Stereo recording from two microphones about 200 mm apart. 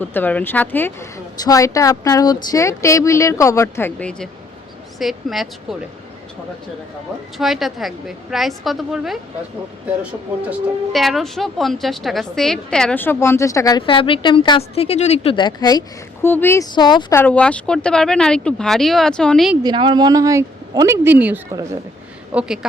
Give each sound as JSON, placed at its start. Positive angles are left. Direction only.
{"t": 0.0, "sound": "a woman's voice", "side_deg": 10}
{"t": 7.3, "sound": "speech", "side_deg": 0}
{"t": 10.5, "sound": "a woman's voice", "side_deg": 0}
{"t": 16.7, "sound": "speech", "side_deg": 20}
{"t": 17.2, "sound": "speech", "side_deg": 5}
{"t": 19.6, "sound": "a woman's voice", "side_deg": -25}